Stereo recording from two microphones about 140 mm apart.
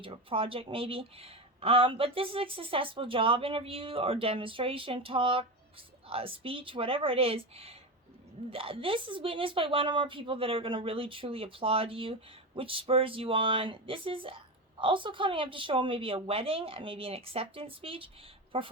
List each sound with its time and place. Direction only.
0.0 s speech: 40° right (ahead or behind)